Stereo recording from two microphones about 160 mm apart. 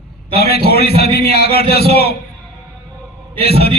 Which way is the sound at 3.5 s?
80° left.